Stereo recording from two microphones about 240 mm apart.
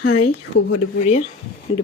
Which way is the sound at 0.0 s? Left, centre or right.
Left.